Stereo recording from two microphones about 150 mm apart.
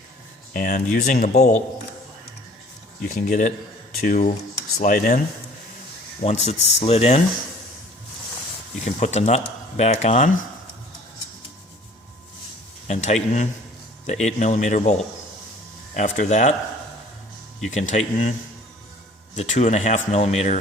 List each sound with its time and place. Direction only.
0.5 s speech: 60° left (ahead or behind)
3.2 s speech: 60° left (ahead or behind)
6.2 s speech: 45° left (ahead or behind)
8.8 s speech: 50° left (ahead or behind)
12.9 s speech: 50° left (ahead or behind)
17.7 s speech: 50° left (ahead or behind)
19.4 s speech: 45° left (ahead or behind)